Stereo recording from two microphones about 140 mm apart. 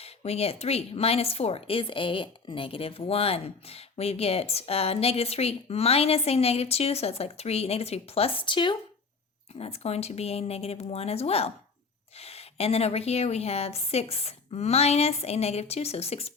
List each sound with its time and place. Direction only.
0.0 s a woman's voice: 45° left (ahead or behind)
9.6 s a woman's voice: 45° left (ahead or behind)